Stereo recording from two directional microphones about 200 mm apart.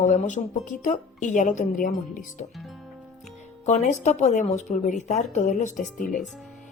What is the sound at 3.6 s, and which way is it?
Speech, 35° left (ahead or behind).